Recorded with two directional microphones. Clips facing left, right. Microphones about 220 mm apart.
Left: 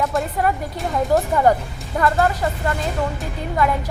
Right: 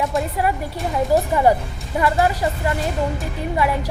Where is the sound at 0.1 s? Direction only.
5° right (ahead or behind).